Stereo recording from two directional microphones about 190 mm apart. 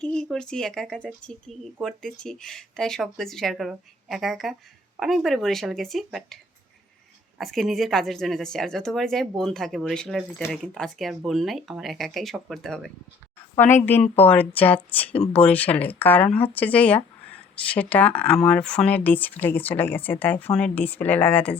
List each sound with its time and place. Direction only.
0.0 s speech: 5° left (ahead or behind)